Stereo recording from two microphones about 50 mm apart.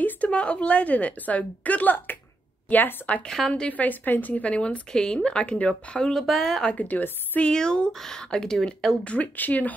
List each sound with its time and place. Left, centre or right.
0.3 s speech: left
3.3 s speech: centre
3.6 s speech: left
6.0 s speech: centre
6.7 s speech: left
7.4 s speech: centre
9.0 s speech: left